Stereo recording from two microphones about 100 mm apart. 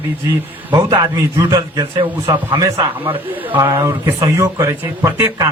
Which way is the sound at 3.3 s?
20° right (ahead or behind).